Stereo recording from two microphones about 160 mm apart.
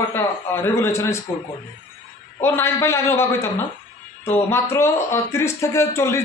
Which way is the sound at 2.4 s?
15° left (ahead or behind).